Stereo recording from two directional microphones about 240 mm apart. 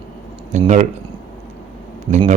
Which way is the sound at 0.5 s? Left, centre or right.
Right.